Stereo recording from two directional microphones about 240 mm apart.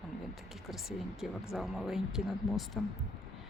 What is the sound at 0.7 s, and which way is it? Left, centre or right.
Speech, centre.